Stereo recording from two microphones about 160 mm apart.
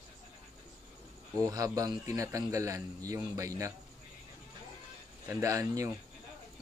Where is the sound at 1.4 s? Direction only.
20° right (ahead or behind).